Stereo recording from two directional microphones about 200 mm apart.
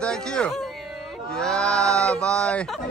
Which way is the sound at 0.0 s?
5° left (ahead or behind).